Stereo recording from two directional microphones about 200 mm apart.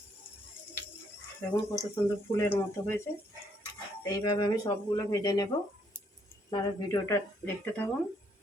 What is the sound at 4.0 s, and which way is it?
Speech, 20° left (ahead or behind).